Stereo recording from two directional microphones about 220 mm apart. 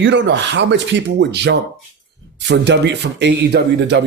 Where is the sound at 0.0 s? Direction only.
55° right (ahead or behind).